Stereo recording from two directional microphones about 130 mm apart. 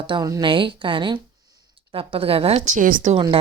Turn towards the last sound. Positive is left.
turn(degrees=-80)